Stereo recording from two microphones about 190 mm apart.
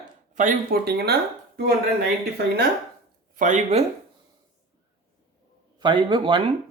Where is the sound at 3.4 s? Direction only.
40° right (ahead or behind).